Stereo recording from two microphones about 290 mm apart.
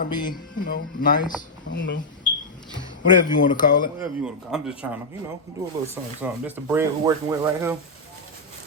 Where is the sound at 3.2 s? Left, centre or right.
Left.